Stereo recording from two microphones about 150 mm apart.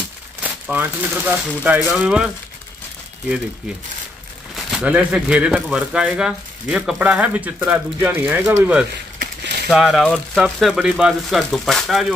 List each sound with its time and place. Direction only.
0.4 s speech: 10° right (ahead or behind)
4.6 s speech: centre (ahead or behind)
9.2 s a sound: 90° right
9.7 s speech: centre (ahead or behind)